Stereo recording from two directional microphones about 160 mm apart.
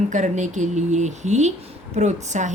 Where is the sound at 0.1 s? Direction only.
50° right (ahead or behind).